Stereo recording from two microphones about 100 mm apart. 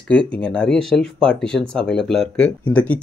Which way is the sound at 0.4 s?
10° left (ahead or behind).